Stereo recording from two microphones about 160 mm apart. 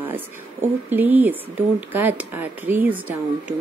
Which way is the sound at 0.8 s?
10° right (ahead or behind).